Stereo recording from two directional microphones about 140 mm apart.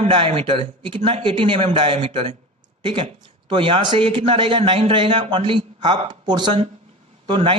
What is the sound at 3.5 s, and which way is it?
Speech, 35° right (ahead or behind).